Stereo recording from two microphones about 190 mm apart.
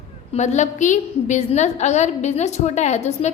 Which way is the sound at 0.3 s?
35° left (ahead or behind).